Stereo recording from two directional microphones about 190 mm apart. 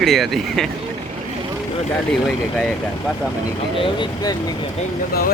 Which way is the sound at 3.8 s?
25° left (ahead or behind).